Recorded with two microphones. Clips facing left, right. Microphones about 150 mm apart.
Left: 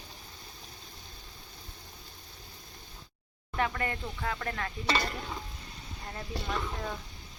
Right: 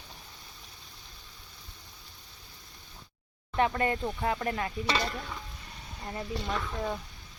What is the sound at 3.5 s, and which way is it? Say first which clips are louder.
Speech: right 5 dB; 25° right (ahead or behind).